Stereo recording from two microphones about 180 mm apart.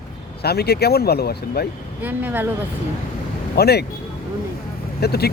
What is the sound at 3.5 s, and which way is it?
Speech, 65° left (ahead or behind).